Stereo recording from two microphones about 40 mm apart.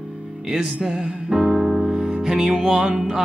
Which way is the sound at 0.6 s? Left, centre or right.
Right.